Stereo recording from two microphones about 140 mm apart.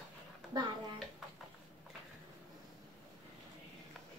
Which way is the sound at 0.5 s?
30° right (ahead or behind).